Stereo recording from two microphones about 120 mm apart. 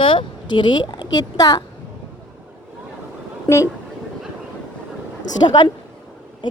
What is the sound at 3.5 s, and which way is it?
Speech, 40° left (ahead or behind).